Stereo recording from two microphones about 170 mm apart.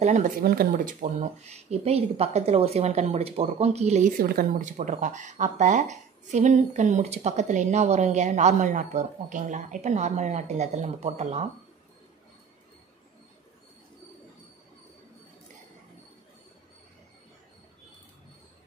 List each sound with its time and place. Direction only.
0.0 s speech: 45° right (ahead or behind)
0.4 s speech: 60° right (ahead or behind); by 4.1 s 40° right (ahead or behind)
4.2 s speech: 60° right (ahead or behind); by 11.4 s 40° right (ahead or behind)